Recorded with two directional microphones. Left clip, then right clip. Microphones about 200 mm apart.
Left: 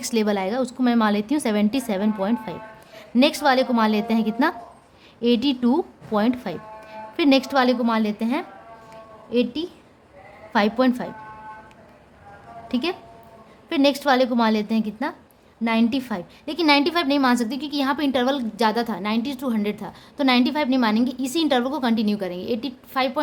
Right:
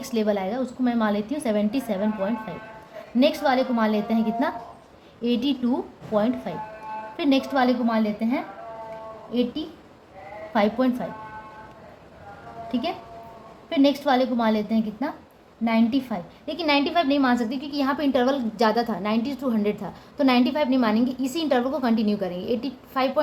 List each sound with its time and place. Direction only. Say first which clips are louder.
0.0 s a woman's voice: left 2 dB; 40° left (ahead or behind)
13.7 s a woman's voice: left 2 dB; 45° left (ahead or behind); by 23.2 s 25° left (ahead or behind)